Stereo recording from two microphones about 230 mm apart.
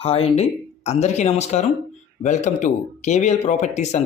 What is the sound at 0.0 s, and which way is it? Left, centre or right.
Speech, left.